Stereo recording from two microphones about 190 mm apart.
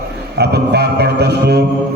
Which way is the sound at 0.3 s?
60° right (ahead or behind).